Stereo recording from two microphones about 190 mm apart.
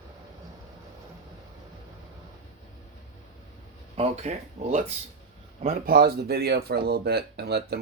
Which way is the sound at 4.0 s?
35° right (ahead or behind).